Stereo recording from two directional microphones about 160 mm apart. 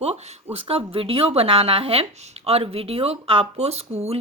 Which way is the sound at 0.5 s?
35° right (ahead or behind).